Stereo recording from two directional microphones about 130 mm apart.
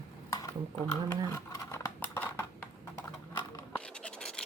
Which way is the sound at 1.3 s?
25° left (ahead or behind).